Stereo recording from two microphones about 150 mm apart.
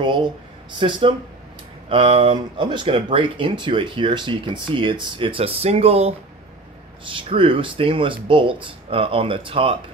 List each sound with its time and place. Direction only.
0.0 s speech: 30° right (ahead or behind)